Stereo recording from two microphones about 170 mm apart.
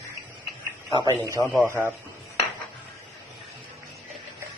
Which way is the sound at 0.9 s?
25° right (ahead or behind).